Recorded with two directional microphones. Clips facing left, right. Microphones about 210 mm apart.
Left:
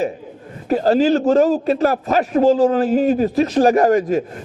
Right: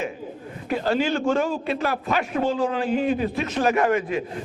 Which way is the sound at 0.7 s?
40° left (ahead or behind).